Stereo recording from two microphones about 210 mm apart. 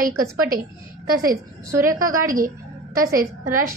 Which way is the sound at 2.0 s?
40° right (ahead or behind).